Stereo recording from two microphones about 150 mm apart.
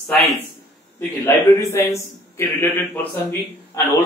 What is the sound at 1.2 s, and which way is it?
A man's voice, 15° left (ahead or behind).